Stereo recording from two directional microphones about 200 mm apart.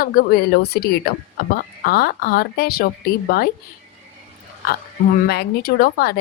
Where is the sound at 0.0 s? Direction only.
45° left (ahead or behind).